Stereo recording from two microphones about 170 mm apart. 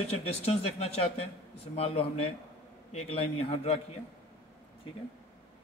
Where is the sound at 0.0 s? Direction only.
35° left (ahead or behind).